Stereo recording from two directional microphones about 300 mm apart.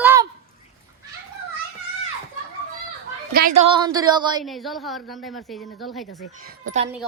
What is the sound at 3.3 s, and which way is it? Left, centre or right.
A woman's voice, right.